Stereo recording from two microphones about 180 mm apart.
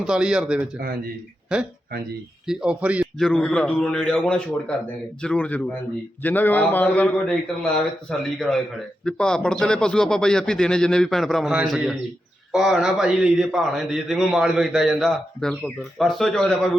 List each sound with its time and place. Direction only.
0.0 s a man's voice: 5° right (ahead or behind)
1.9 s speech: 60° right (ahead or behind)
2.5 s a man's voice: 5° right (ahead or behind)